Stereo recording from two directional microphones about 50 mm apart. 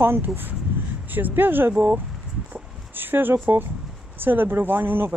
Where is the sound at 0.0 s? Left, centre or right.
Right.